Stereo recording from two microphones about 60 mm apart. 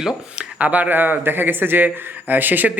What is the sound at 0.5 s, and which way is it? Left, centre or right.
A man's voice, right.